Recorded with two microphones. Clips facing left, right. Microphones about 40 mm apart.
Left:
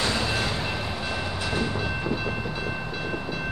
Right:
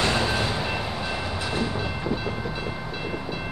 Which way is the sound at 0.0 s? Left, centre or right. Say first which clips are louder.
Right 3 dB; right.